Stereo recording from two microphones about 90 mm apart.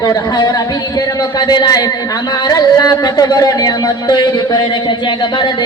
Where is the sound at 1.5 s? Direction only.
45° left (ahead or behind).